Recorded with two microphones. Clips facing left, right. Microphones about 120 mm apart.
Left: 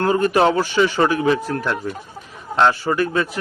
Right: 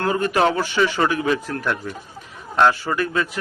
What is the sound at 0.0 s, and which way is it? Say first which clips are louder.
A man's voice: left 3 dB; 30° left (ahead or behind).